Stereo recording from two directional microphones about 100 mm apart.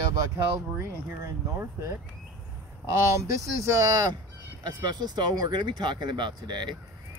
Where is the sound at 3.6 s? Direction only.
30° right (ahead or behind).